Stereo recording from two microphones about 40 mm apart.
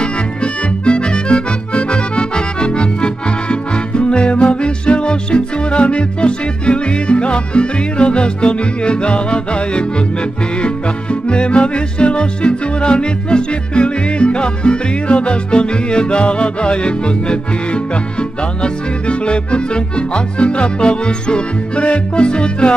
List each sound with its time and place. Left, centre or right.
0.0 s accordion: left
10.6 s music: left